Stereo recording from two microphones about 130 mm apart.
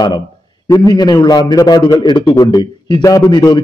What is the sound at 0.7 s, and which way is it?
A man's voice, 30° left (ahead or behind).